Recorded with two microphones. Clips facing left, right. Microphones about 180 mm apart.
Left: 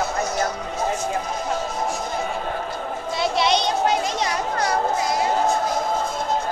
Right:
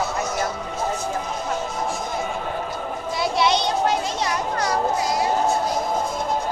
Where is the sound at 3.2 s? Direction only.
20° left (ahead or behind).